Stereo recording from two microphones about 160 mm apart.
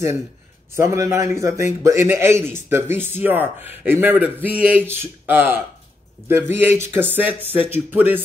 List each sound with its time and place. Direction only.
0.7 s speech: 20° right (ahead or behind)